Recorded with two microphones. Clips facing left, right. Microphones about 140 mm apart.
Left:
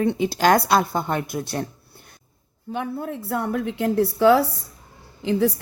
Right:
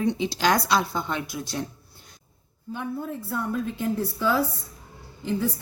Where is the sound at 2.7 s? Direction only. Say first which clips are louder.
Left 3 dB; 70° left (ahead or behind).